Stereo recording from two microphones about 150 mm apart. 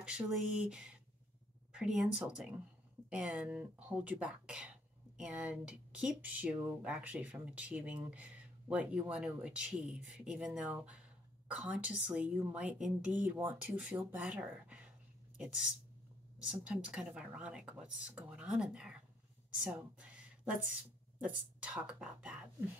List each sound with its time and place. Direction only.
0.0 s speech: 5° right (ahead or behind)
19.6 s a sound: 10° right (ahead or behind)
21.2 s speech: 5° right (ahead or behind)